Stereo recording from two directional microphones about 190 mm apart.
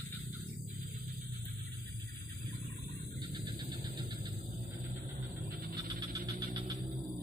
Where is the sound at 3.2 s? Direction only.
25° right (ahead or behind).